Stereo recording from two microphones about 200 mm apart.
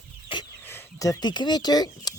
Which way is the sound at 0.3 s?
25° left (ahead or behind).